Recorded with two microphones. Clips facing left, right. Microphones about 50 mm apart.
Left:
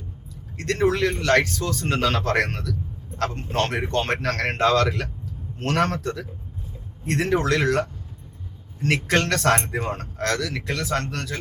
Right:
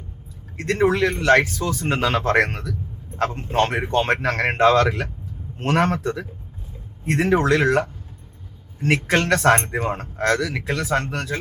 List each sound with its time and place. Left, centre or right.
0.5 s speech: centre
9.0 s speech: centre